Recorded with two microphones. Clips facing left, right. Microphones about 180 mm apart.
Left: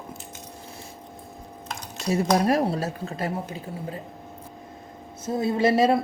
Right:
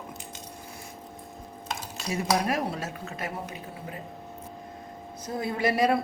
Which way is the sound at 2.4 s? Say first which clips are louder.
Left 7 dB; 35° left (ahead or behind).